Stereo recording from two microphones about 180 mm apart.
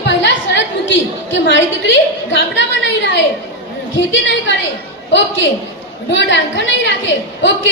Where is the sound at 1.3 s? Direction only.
90° left.